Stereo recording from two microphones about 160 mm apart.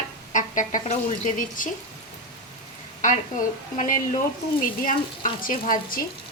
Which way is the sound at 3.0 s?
55° left (ahead or behind).